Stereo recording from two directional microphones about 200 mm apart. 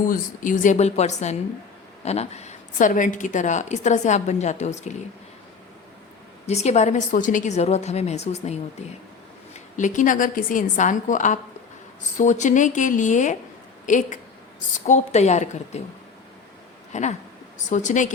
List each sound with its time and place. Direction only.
0.0 s a woman's voice: 40° left (ahead or behind)
6.4 s a woman's voice: 35° left (ahead or behind)
9.7 s a woman's voice: 40° left (ahead or behind)
16.9 s a woman's voice: 35° left (ahead or behind)